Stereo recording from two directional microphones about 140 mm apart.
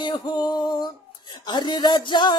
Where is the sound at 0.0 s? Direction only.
30° left (ahead or behind).